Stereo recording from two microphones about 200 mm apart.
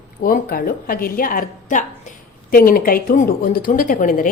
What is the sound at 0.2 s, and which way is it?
A woman's voice, 45° left (ahead or behind).